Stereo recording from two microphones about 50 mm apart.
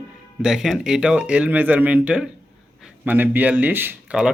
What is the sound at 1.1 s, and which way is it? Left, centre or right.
Speech, right.